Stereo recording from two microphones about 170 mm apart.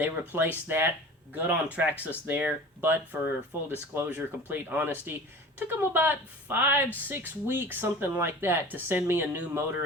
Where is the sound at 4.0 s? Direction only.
10° right (ahead or behind).